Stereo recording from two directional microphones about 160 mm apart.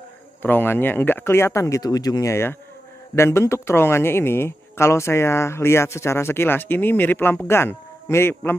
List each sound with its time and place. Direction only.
0.4 s speech: 10° left (ahead or behind)